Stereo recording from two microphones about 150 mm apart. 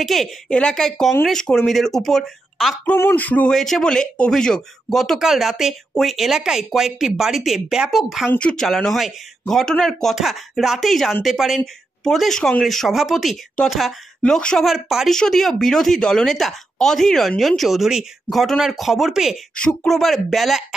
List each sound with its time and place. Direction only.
0.0 s speech: centre (ahead or behind)
3.0 s speech: 15° left (ahead or behind)